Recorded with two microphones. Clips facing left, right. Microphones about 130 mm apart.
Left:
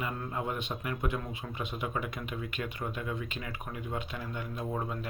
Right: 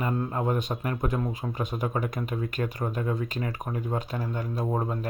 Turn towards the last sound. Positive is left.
turn(degrees=-40)  # may be behind; listen again after turning